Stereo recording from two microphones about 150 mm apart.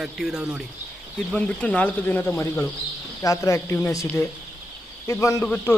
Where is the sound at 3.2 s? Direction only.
20° left (ahead or behind).